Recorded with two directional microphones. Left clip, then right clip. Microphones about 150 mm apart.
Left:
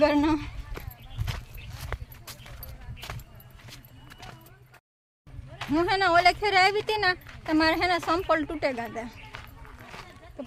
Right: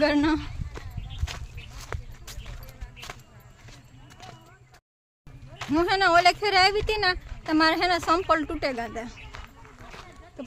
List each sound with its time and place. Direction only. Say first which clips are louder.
0.0 s speech: even; 10° right (ahead or behind)
1.3 s a sound: even; 10° left (ahead or behind)
5.7 s speech: right 2 dB; 10° right (ahead or behind)
9.3 s run: even; 15° left (ahead or behind)